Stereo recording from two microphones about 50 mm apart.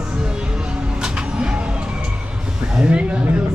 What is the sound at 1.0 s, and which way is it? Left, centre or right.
Vehicle, centre.